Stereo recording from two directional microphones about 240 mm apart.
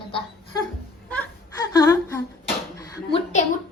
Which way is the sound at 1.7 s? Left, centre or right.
Centre.